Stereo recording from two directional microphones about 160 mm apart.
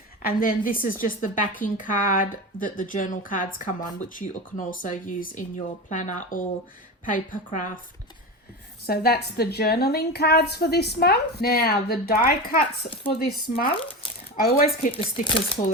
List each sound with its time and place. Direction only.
0.2 s a woman's voice: 65° left (ahead or behind)
8.9 s a woman's voice: 80° left
14.9 s speech: 35° left (ahead or behind)